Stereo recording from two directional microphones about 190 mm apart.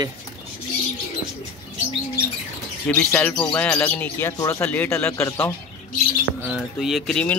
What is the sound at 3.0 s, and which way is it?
Speech, 10° left (ahead or behind).